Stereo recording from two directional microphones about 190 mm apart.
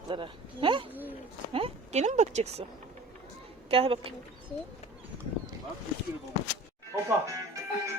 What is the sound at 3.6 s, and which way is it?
Speech, 30° right (ahead or behind).